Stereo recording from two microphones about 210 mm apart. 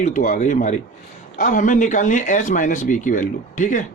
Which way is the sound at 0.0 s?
40° left (ahead or behind).